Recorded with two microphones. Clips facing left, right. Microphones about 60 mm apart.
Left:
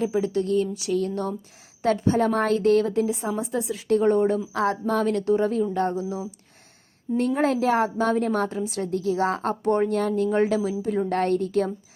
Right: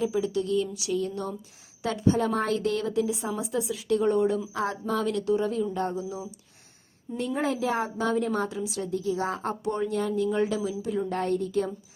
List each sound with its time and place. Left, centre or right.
0.0 s a woman's voice: left
0.9 s a woman's voice: left
4.5 s a woman's voice: left
11.1 s a woman's voice: left